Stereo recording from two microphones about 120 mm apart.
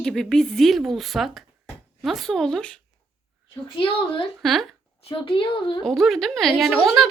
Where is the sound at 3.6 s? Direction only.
45° left (ahead or behind).